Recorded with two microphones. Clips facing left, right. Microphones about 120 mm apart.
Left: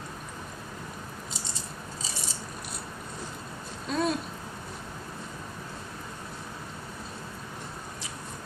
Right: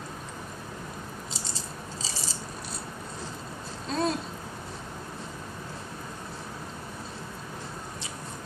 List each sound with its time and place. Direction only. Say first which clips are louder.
3.8 s babbling: even; 30° right (ahead or behind)